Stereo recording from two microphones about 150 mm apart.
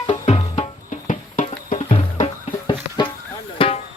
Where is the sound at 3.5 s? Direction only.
35° left (ahead or behind).